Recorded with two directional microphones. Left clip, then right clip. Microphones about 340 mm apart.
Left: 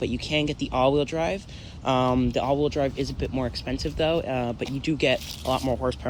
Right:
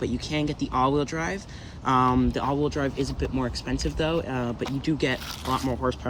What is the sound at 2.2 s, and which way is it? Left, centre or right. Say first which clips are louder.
Speech: left 2 dB; centre.